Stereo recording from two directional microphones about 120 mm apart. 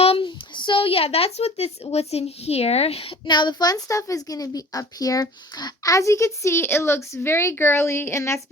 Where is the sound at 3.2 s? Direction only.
40° left (ahead or behind).